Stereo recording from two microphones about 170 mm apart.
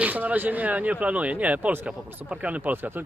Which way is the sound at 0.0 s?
10° right (ahead or behind).